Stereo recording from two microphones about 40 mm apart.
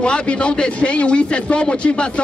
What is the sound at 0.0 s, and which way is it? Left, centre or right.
A man's voice, left.